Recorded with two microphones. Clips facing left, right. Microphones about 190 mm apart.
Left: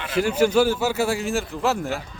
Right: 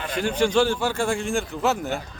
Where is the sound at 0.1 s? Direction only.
5° left (ahead or behind).